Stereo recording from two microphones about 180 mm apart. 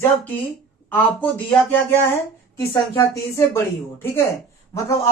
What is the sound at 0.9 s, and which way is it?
Speech, 10° left (ahead or behind).